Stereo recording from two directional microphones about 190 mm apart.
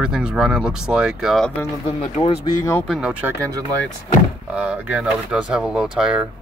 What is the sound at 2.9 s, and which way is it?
Speech, 5° right (ahead or behind).